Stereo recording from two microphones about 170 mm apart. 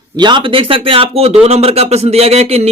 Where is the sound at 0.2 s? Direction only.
25° right (ahead or behind).